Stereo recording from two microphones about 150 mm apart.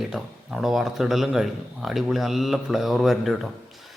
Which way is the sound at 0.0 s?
Centre (ahead or behind).